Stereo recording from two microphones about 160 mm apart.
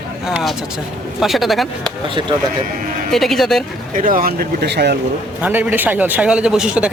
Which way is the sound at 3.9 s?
55° right (ahead or behind).